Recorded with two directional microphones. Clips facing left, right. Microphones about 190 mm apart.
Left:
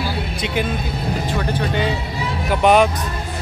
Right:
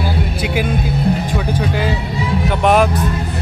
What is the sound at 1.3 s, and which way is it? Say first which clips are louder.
Speech: right 2 dB; 5° right (ahead or behind).